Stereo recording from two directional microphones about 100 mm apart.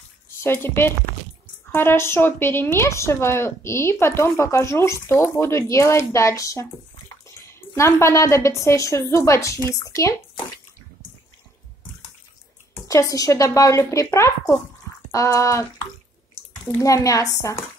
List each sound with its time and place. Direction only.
0.4 s a woman's voice: 25° left (ahead or behind)
12.8 s a woman's voice: 35° left (ahead or behind)
16.8 s a woman's voice: 35° left (ahead or behind)